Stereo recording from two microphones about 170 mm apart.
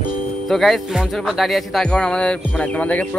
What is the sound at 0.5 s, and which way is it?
Speech, centre (ahead or behind).